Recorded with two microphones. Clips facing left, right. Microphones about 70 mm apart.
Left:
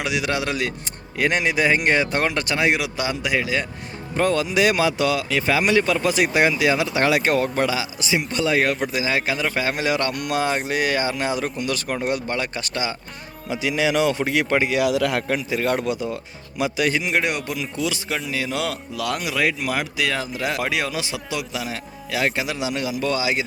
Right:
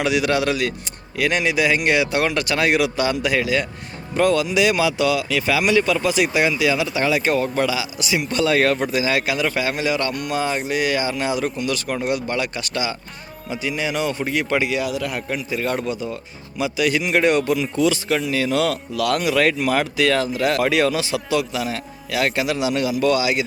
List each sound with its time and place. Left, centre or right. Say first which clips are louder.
0.0 s speech: right 5 dB; centre
1.1 s speech: right 1 dB; left
4.2 s speech: right 2 dB; left; by 9.0 s centre
9.0 s speech: right 2 dB; left
9.7 s speech: right 1 dB; left
13.5 s speech: left 3 dB; left
14.5 s speech: right 1 dB; left
14.8 s a man's voice: left 4 dB; left
17.1 s speech: right 6 dB; centre
19.3 s speech: right 4 dB; centre; by 23.4 s left